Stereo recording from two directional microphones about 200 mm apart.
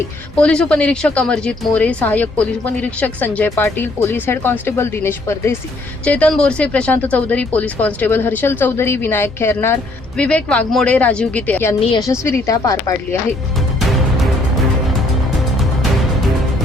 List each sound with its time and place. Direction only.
0.3 s a woman's voice: 5° left (ahead or behind)
11.8 s a woman's voice: 20° left (ahead or behind)
13.7 s music: centre (ahead or behind)